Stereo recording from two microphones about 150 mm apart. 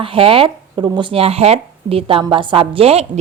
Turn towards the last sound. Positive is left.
turn(degrees=-40)  # may be behind; listen again after turning